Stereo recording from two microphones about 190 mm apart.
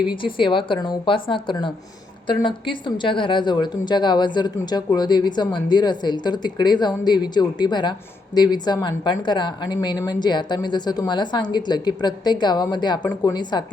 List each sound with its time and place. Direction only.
0.3 s a woman's voice: 25° left (ahead or behind)